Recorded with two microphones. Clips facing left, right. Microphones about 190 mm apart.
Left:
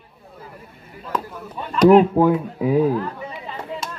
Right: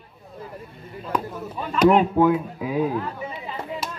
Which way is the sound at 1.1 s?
10° right (ahead or behind).